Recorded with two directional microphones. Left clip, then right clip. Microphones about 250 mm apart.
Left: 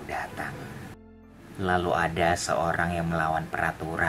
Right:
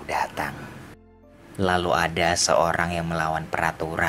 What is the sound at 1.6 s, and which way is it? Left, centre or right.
Speech, right.